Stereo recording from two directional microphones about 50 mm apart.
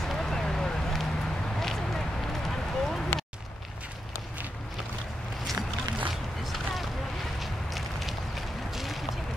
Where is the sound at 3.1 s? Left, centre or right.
Left.